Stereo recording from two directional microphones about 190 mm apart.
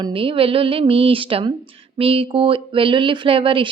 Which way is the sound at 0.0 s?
30° right (ahead or behind).